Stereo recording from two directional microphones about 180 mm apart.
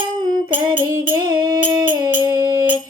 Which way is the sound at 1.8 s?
25° right (ahead or behind).